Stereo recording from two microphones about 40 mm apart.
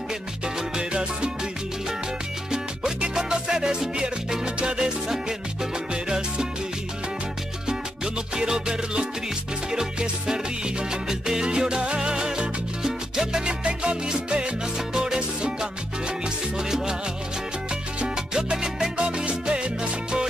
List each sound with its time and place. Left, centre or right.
0.6 s music: right
2.5 s music: centre
6.0 s salsa music: right
7.6 s salsa music: centre
9.7 s music: centre
18.0 s salsa music: centre